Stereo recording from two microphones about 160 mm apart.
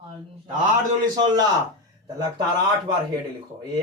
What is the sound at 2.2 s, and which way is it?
Speech, 25° right (ahead or behind).